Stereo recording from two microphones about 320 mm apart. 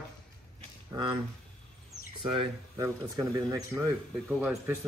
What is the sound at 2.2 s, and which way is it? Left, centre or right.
Speech, centre.